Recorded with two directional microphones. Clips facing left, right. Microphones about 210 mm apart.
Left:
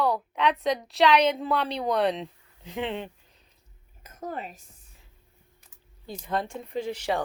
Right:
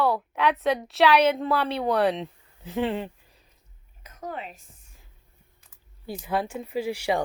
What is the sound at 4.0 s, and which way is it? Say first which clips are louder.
Speech: even; 50° left (ahead or behind).